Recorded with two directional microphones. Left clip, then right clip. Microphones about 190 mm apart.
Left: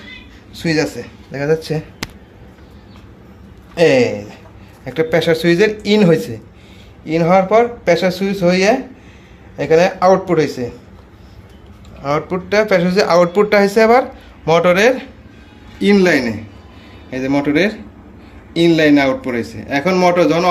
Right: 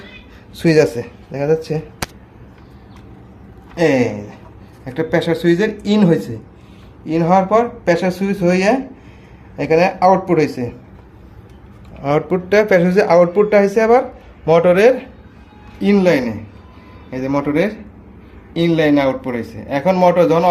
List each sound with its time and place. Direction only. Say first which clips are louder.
0.5 s speech: right 5 dB; 35° right (ahead or behind)
1.3 s speech: even; 5° right (ahead or behind)
3.8 s a man's voice: left 3 dB; 5° left (ahead or behind)
12.0 s a man's voice: right 2 dB; 20° right (ahead or behind)